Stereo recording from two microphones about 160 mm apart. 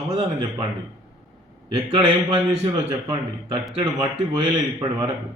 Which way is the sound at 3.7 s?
25° right (ahead or behind).